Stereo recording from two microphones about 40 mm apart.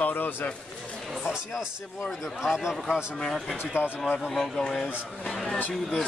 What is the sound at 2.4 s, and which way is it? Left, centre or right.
Speech, centre.